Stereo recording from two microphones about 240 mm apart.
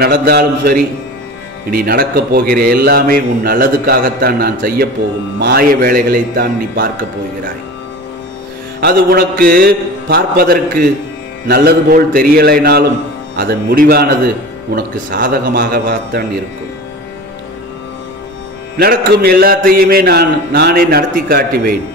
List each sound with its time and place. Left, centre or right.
0.0 s a man's voice: right
8.8 s a man's voice: right
18.8 s a man's voice: right